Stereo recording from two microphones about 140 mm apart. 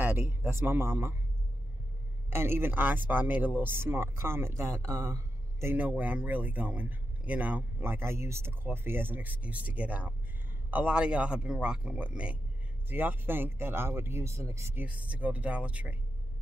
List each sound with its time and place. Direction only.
0.0 s a sound: 15° right (ahead or behind)
0.5 s speech: 15° right (ahead or behind)
2.2 s speech: 15° right (ahead or behind)